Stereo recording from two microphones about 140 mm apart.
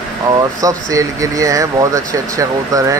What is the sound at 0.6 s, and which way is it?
Speech, 25° right (ahead or behind).